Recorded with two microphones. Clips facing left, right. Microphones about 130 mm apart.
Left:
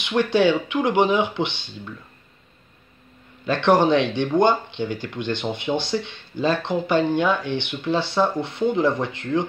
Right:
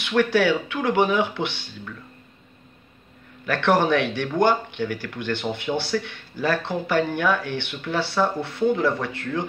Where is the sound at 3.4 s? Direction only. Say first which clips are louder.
Left 3 dB; 20° left (ahead or behind).